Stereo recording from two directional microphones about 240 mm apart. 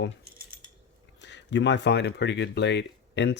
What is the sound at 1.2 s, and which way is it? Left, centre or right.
Speech, left.